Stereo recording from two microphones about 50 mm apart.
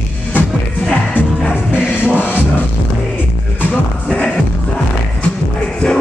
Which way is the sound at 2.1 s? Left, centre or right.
Left.